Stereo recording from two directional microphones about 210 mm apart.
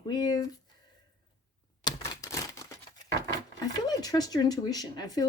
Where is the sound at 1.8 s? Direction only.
15° left (ahead or behind).